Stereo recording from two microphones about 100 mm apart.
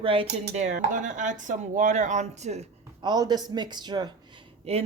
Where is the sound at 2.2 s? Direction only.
90° right.